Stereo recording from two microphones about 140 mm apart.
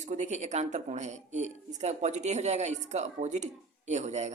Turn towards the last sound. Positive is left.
turn(degrees=-55)  # may be behind; listen again after turning